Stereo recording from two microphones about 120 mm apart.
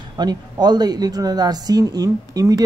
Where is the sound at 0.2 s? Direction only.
35° right (ahead or behind).